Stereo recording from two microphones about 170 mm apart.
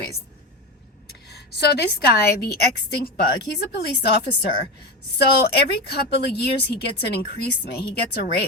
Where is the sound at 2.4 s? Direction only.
65° left (ahead or behind).